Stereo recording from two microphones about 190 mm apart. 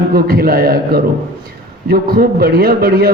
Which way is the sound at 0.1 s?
55° right (ahead or behind).